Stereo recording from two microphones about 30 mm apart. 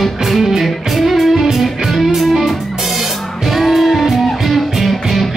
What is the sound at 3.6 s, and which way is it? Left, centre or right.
Music, centre.